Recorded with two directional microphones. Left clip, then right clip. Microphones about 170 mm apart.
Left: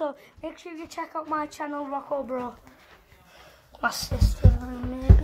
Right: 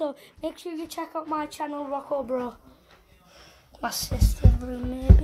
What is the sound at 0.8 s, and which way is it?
Speech, 5° right (ahead or behind).